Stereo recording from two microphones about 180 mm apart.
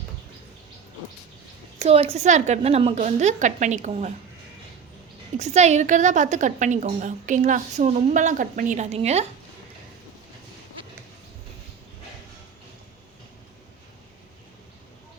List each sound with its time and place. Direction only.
1.8 s a woman's voice: 35° right (ahead or behind)
5.4 s a woman's voice: 40° right (ahead or behind)